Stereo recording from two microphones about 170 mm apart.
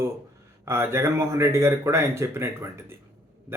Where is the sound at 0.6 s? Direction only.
15° right (ahead or behind).